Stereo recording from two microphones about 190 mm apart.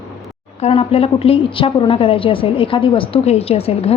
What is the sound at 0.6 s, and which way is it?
A woman's voice, 30° left (ahead or behind).